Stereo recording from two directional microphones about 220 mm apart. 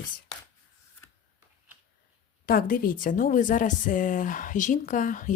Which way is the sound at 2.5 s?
40° left (ahead or behind).